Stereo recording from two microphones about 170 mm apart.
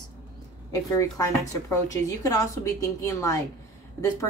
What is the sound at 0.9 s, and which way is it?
A woman's voice, 20° left (ahead or behind).